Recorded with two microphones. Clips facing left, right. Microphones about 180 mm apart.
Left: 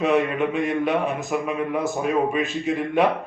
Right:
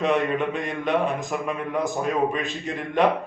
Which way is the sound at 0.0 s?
5° left (ahead or behind).